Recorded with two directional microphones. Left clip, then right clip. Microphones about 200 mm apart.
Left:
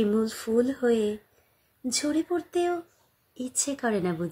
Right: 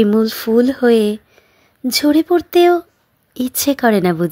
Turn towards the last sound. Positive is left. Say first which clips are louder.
# right 14 dB
turn(degrees=-40)  # may be behind; listen again after turning